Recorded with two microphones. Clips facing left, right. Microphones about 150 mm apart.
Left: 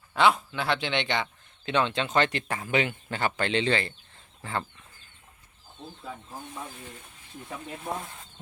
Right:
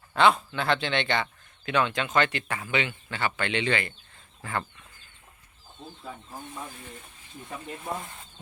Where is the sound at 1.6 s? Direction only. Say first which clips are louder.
Even; 30° left (ahead or behind).